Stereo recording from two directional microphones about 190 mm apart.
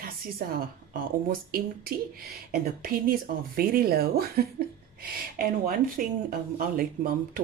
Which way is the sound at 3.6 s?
50° right (ahead or behind).